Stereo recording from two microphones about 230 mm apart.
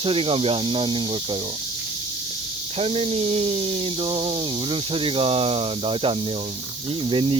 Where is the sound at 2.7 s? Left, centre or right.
Right.